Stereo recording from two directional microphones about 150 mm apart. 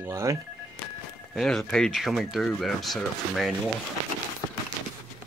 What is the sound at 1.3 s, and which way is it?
Speech, 5° left (ahead or behind).